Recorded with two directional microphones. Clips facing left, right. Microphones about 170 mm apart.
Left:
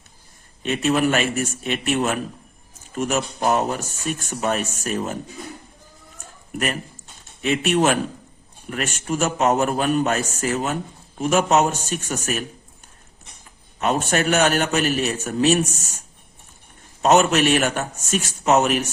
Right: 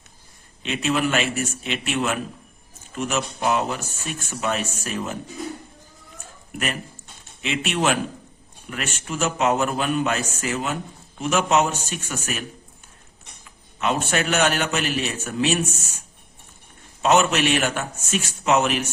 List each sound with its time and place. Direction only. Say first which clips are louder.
0.6 s speech: left 3 dB; 45° left (ahead or behind)
7.4 s speech: left 4 dB; 45° left (ahead or behind)
13.7 s speech: left 2 dB; 45° left (ahead or behind)
17.0 s speech: left 3 dB; 45° left (ahead or behind)